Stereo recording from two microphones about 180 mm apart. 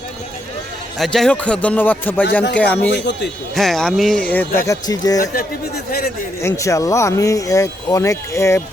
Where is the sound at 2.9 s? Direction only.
75° left (ahead or behind).